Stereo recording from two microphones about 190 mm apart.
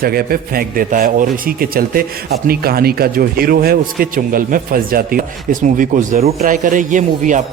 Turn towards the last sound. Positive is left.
turn(degrees=-40)  # may be behind; listen again after turning